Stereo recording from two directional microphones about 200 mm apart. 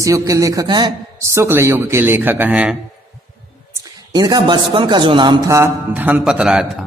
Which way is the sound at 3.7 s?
20° right (ahead or behind).